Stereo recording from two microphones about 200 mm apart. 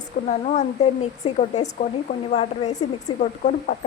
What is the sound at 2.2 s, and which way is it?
Speech, 30° left (ahead or behind).